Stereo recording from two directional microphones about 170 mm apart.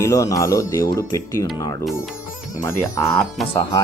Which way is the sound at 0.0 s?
20° left (ahead or behind).